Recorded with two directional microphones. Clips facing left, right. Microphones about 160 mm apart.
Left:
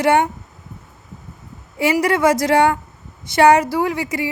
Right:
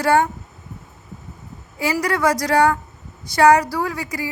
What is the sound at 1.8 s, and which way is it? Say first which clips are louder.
Speech: left 4 dB; 25° left (ahead or behind).